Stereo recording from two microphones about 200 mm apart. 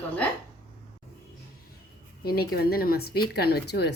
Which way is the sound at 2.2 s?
50° left (ahead or behind).